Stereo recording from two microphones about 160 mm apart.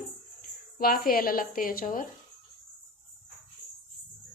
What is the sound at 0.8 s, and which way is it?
A woman's voice, 65° left (ahead or behind).